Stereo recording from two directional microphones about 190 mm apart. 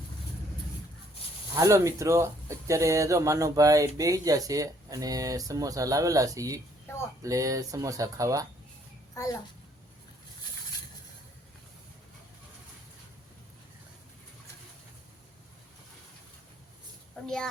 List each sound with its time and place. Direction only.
1.5 s speech: 15° right (ahead or behind)
17.2 s a child's voice: 5° left (ahead or behind)